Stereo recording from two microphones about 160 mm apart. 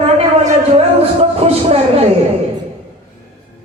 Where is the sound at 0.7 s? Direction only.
40° right (ahead or behind).